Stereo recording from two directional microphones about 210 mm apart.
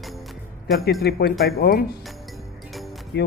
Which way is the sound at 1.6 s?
45° left (ahead or behind).